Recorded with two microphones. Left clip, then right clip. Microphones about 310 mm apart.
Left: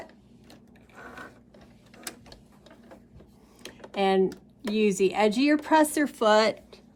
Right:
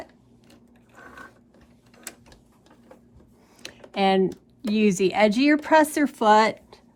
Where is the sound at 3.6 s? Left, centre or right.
Right.